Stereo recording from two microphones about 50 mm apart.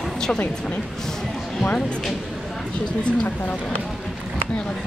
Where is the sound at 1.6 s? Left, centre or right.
Left.